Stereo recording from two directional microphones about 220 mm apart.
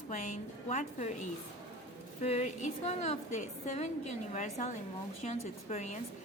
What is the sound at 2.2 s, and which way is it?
A woman's voice, 30° left (ahead or behind).